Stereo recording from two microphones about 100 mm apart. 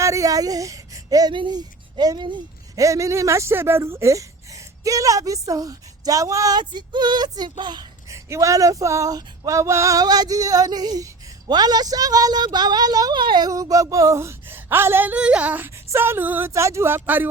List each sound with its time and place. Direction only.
0.0 s speech: 35° right (ahead or behind)
1.3 s speech: 50° right (ahead or behind)
2.7 s speech: 30° right (ahead or behind)
6.6 s a sound: 50° right (ahead or behind)
8.1 s female singing: 30° right (ahead or behind); by 13.5 s 50° right (ahead or behind)
13.5 s speech: 35° right (ahead or behind); by 15.7 s 15° right (ahead or behind)
15.7 s speech: 25° right (ahead or behind)